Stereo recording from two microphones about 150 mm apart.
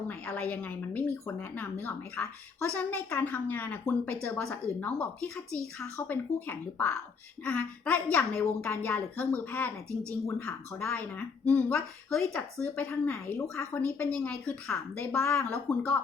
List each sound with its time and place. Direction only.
0.1 s speech: 10° left (ahead or behind)
15.2 s speech: 15° left (ahead or behind)
15.7 s speech: 5° left (ahead or behind)